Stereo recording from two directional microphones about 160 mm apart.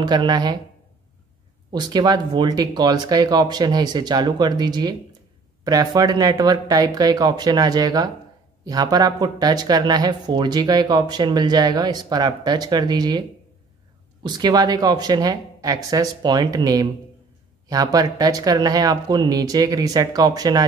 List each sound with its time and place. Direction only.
0.0 s speech: 25° right (ahead or behind)
1.7 s speech: 25° right (ahead or behind)
14.2 s speech: 25° right (ahead or behind)